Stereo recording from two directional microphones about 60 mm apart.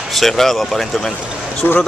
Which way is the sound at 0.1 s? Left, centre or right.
Centre.